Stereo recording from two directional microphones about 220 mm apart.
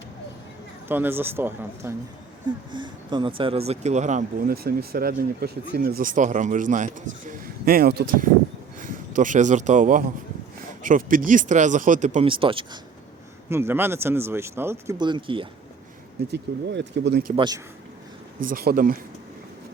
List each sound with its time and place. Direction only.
0.9 s speech: 10° right (ahead or behind)
2.7 s speech: 20° right (ahead or behind)
13.5 s speech: 10° right (ahead or behind)
16.3 s speech: 55° right (ahead or behind)
17.3 s speech: 20° right (ahead or behind)
18.4 s speech: 40° right (ahead or behind)